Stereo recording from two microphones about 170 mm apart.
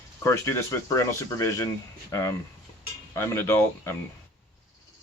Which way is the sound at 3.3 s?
15° left (ahead or behind).